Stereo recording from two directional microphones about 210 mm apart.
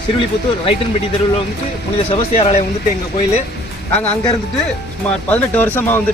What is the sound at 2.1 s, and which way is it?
Speech, 30° left (ahead or behind).